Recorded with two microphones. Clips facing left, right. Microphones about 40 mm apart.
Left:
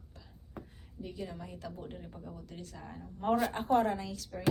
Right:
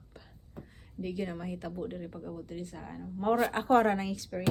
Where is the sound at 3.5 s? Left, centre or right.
Right.